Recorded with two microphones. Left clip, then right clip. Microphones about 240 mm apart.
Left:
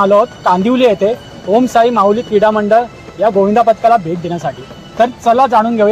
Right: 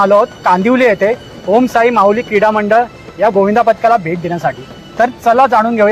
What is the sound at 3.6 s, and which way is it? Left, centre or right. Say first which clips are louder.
Speech: left 2 dB; centre.